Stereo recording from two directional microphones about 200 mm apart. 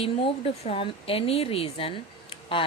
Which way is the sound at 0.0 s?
30° left (ahead or behind).